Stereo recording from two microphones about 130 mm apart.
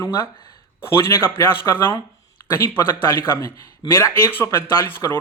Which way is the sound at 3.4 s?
25° left (ahead or behind).